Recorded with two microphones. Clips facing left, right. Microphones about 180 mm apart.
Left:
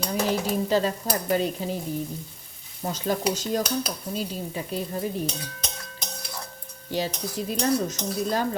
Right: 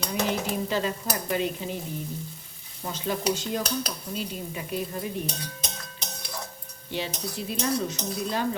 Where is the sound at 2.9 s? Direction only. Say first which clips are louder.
Left 1 dB; 40° left (ahead or behind).